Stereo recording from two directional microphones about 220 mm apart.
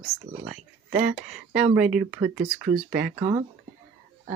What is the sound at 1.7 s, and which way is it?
Speech, 5° right (ahead or behind).